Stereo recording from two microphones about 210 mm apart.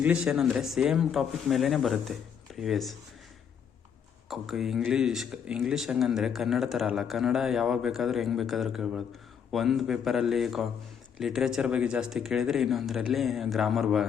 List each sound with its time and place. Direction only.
0.0 s speech: 5° right (ahead or behind)
4.3 s speech: centre (ahead or behind)